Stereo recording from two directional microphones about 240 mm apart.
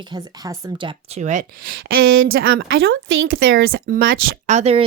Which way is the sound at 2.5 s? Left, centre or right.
Right.